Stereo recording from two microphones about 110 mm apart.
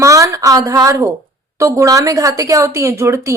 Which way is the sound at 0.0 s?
30° right (ahead or behind).